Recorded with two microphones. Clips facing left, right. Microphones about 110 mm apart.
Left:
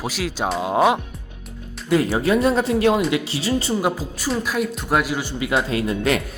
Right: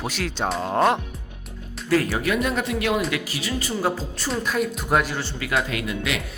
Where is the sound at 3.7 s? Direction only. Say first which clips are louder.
Left 2 dB; 15° left (ahead or behind).